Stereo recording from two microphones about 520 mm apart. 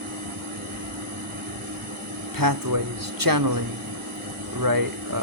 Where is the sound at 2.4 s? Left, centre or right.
Right.